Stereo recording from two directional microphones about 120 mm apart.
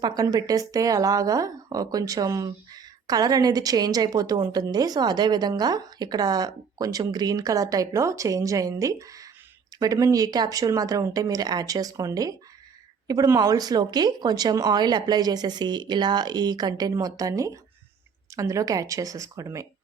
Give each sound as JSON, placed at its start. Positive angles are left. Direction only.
{"t": 0.0, "sound": "speech", "side_deg": -35}